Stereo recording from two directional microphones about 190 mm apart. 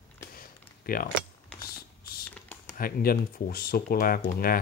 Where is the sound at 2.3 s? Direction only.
5° left (ahead or behind).